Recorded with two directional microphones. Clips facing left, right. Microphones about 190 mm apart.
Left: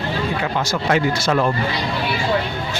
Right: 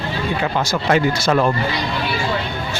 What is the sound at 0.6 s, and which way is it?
Speech, 35° right (ahead or behind).